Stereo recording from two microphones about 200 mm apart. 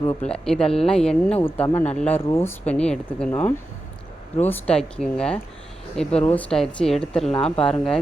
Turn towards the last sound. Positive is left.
turn(degrees=5)  # may be behind; listen again after turning